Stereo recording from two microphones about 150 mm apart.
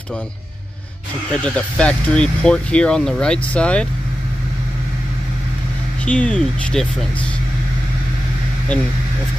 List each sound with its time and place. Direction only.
1.3 s speech: 5° left (ahead or behind)
6.0 s speech: 10° left (ahead or behind)